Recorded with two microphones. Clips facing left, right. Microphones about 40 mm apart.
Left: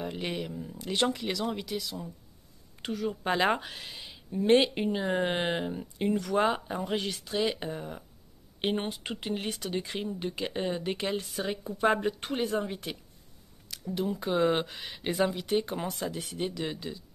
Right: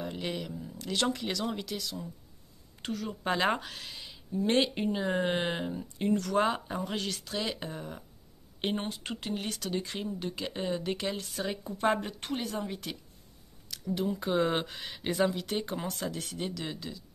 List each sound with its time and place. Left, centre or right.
0.0 s speech: centre
13.7 s speech: centre